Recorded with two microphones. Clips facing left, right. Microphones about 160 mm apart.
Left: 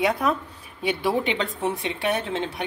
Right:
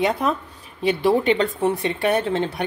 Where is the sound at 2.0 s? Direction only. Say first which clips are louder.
Right 5 dB; 40° right (ahead or behind).